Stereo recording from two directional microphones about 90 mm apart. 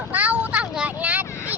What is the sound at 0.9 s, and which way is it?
Vehicle, 15° right (ahead or behind).